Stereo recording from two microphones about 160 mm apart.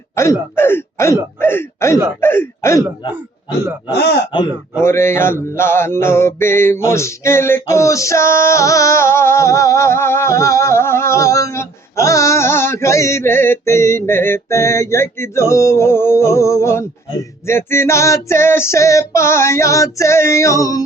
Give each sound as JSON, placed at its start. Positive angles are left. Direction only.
{"t": 0.2, "sound": "music", "side_deg": 15}
{"t": 3.9, "sound": "speech", "side_deg": 90}
{"t": 4.8, "sound": "music", "side_deg": 15}